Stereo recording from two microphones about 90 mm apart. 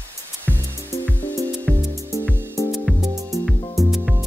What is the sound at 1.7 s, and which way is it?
Music, 15° right (ahead or behind).